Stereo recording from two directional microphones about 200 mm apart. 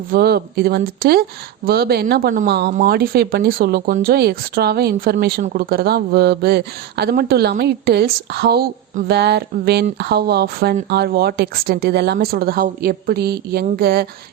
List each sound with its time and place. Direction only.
0.1 s speech: 50° right (ahead or behind)